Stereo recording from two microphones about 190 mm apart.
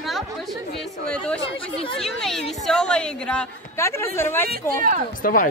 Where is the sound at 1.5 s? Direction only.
30° left (ahead or behind).